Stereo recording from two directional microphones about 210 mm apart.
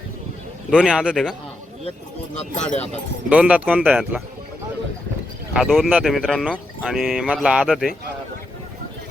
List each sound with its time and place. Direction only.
0.7 s speech: 5° right (ahead or behind)
2.3 s speech: 30° left (ahead or behind)
3.2 s speech: 5° right (ahead or behind)
5.5 s speech: centre (ahead or behind)